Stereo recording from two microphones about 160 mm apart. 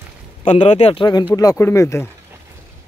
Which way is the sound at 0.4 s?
35° left (ahead or behind).